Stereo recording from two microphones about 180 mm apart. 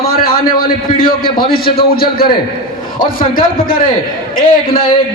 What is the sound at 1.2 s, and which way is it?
Speech, 25° left (ahead or behind).